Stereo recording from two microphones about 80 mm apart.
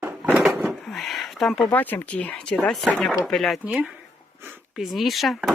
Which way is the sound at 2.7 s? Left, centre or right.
Centre.